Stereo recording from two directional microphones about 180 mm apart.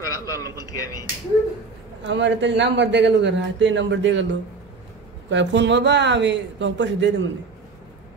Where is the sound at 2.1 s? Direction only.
85° right.